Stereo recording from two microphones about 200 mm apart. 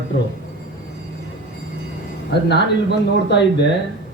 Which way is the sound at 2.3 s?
55° left (ahead or behind).